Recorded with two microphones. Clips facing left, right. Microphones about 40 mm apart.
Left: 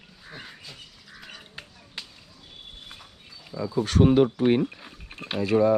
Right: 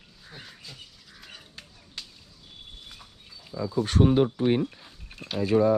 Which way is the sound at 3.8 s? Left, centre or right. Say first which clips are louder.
Left 3 dB; left.